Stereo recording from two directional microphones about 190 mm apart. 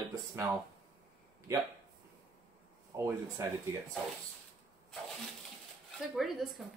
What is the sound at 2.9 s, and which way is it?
Speech, 20° right (ahead or behind).